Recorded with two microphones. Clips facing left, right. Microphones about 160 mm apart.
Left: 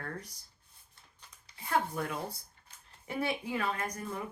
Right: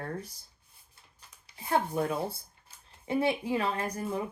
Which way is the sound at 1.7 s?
30° right (ahead or behind).